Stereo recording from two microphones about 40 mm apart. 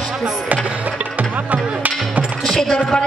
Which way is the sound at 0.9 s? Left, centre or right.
Right.